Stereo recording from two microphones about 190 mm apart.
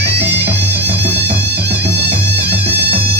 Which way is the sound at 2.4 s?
60° right (ahead or behind).